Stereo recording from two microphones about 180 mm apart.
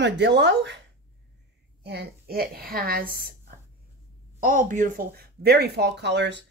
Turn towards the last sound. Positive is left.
turn(degrees=-70)  # may be behind; listen again after turning